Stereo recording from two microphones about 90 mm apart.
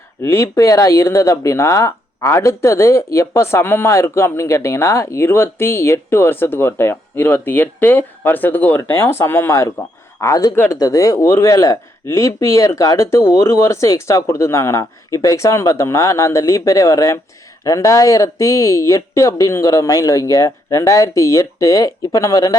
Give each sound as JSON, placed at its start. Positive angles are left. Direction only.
{"t": 0.2, "sound": "speech", "side_deg": 35}